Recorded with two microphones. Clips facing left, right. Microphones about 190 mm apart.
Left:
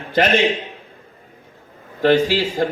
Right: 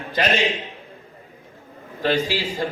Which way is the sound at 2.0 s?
50° left (ahead or behind).